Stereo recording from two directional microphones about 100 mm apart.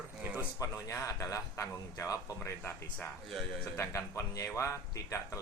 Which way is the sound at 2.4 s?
20° left (ahead or behind).